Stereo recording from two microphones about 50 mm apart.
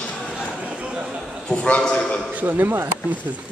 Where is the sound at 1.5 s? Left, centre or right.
Left.